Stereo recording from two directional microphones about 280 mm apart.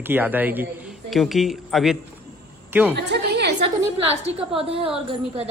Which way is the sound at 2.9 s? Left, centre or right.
Right.